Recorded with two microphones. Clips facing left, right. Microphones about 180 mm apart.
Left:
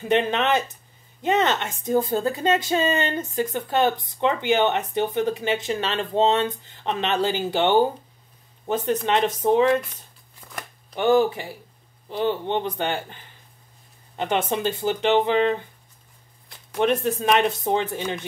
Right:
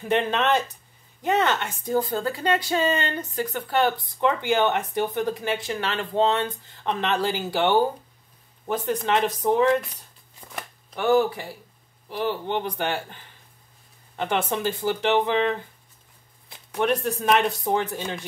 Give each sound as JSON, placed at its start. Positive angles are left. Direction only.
{"t": 0.1, "sound": "speech", "side_deg": 15}
{"t": 10.4, "sound": "shuffling cards", "side_deg": -10}
{"t": 11.0, "sound": "speech", "side_deg": 20}
{"t": 16.7, "sound": "speech", "side_deg": 20}